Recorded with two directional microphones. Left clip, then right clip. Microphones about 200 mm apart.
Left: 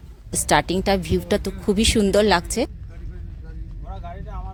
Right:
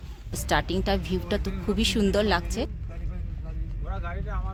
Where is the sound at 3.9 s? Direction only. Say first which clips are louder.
Even; 15° left (ahead or behind).